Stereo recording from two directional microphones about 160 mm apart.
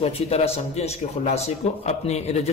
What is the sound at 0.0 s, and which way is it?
Speech, 40° left (ahead or behind).